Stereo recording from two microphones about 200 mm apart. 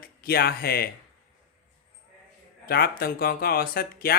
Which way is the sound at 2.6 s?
50° left (ahead or behind).